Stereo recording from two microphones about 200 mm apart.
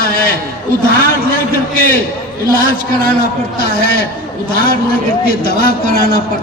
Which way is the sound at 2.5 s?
45° left (ahead or behind).